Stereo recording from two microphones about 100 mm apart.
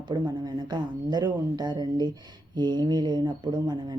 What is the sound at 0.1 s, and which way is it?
Speech, 45° right (ahead or behind).